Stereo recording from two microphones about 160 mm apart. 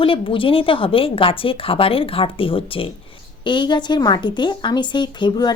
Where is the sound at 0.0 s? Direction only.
35° left (ahead or behind).